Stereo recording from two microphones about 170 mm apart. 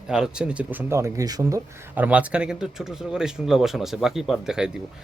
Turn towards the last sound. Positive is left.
turn(degrees=-5)  # may be behind; listen again after turning